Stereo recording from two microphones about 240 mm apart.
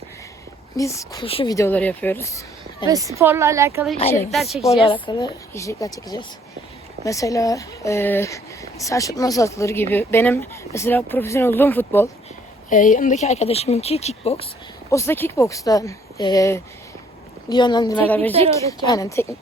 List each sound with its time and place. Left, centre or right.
0.8 s speech: centre
2.8 s a woman's voice: centre
4.1 s speech: centre
5.0 s speech: centre
12.7 s speech: left
14.8 s speech: centre
17.9 s speech: centre